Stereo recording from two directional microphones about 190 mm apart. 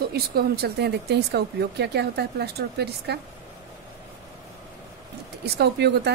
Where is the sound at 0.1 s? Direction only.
55° right (ahead or behind).